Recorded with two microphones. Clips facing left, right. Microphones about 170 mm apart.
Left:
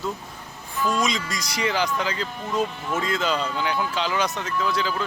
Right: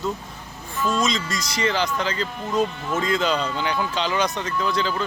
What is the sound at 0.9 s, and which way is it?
Speech, 10° left (ahead or behind).